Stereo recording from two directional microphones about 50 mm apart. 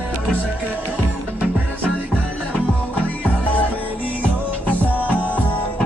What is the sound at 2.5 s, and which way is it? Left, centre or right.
Music, left.